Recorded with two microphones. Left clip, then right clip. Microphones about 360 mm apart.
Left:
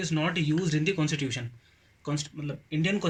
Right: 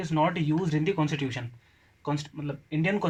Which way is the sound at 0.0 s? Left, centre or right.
Centre.